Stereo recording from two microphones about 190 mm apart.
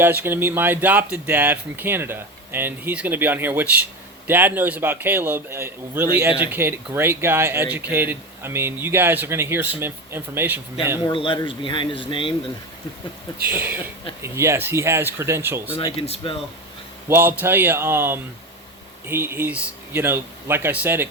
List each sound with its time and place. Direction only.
0.0 s speech: 10° right (ahead or behind)
11.0 s speech: 25° left (ahead or behind)
13.4 s speech: 10° right (ahead or behind)
16.0 s speech: 30° left (ahead or behind)
17.1 s speech: 10° right (ahead or behind)